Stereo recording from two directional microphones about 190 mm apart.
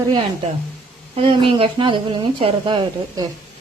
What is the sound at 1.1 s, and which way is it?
Speech, 25° right (ahead or behind).